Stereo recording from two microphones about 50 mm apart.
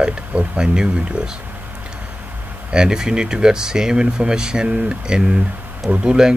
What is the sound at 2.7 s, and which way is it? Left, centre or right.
Speech, centre.